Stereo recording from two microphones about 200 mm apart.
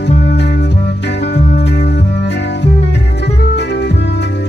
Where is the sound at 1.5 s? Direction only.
55° left (ahead or behind).